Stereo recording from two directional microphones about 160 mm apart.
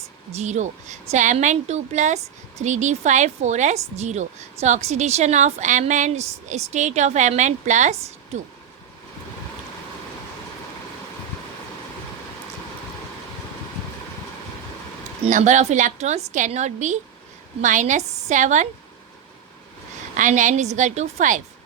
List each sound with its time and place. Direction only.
0.3 s a woman's voice: 45° right (ahead or behind)
15.3 s a woman's voice: 50° right (ahead or behind)
20.1 s a woman's voice: 50° right (ahead or behind)